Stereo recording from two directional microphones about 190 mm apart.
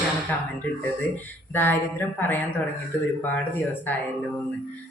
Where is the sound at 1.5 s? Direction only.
10° left (ahead or behind).